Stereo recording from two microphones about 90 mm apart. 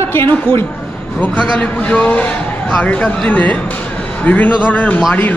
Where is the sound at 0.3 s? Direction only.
25° left (ahead or behind).